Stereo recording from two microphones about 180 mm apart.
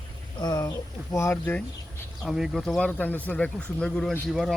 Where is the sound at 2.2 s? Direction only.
Centre (ahead or behind).